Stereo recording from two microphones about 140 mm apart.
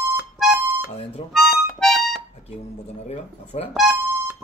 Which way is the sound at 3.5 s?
55° left (ahead or behind).